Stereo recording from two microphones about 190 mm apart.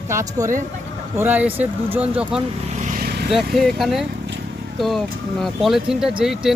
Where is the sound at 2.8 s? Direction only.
55° right (ahead or behind).